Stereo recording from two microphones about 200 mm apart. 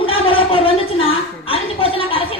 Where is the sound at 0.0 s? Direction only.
25° left (ahead or behind).